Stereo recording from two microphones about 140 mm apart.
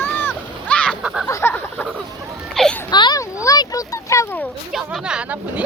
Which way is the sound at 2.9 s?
30° left (ahead or behind).